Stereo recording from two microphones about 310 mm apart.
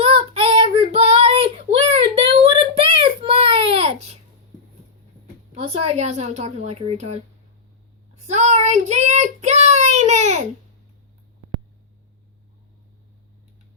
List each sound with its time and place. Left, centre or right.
0.0 s child singing: centre
3.0 s baby cry: centre
5.5 s a woman's voice: centre
8.3 s child singing: right